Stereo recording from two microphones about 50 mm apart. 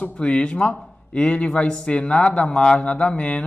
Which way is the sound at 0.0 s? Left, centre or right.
Left.